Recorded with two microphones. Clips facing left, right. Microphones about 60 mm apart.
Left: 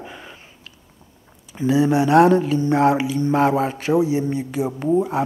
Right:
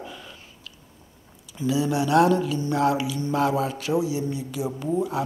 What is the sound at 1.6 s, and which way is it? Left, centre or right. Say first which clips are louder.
Speech: left 6 dB; left.